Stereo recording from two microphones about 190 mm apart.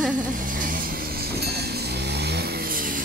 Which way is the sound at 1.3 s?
55° right (ahead or behind).